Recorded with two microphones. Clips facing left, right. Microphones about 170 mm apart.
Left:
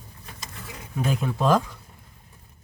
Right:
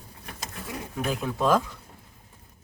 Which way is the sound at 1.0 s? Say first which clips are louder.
Left 2 dB; centre (ahead or behind).